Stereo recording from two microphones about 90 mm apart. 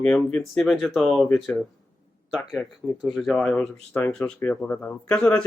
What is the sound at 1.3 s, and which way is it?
Speech, 10° left (ahead or behind).